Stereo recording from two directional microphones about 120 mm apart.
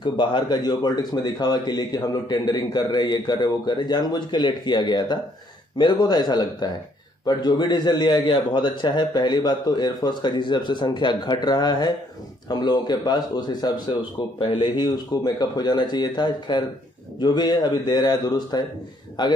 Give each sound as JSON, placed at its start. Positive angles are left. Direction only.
{"t": 0.0, "sound": "speech", "side_deg": 40}